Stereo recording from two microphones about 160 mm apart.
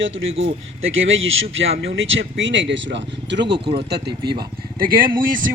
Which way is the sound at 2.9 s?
90° right.